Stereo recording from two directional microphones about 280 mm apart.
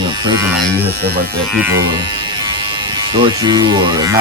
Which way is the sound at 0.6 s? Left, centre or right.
Centre.